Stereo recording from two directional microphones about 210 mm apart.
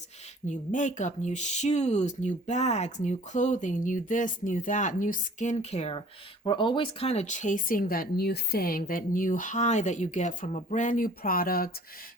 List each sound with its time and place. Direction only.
0.4 s speech: 35° left (ahead or behind)